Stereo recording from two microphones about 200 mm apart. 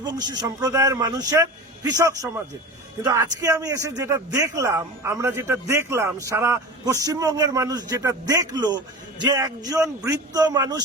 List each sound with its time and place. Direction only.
0.0 s a man's voice: 20° right (ahead or behind)